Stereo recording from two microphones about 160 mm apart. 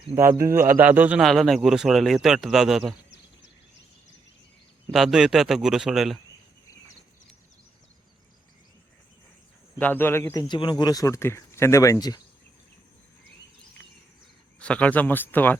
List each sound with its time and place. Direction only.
0.1 s speech: 15° right (ahead or behind)
1.2 s speech: centre (ahead or behind)
4.9 s speech: 5° right (ahead or behind)
9.7 s speech: 10° left (ahead or behind)
10.5 s speech: 30° left (ahead or behind)
14.6 s speech: 10° left (ahead or behind)